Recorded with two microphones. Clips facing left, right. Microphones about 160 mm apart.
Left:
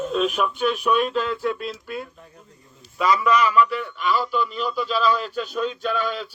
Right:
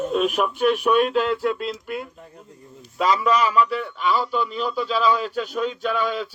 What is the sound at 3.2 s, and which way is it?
A man's voice, 30° right (ahead or behind).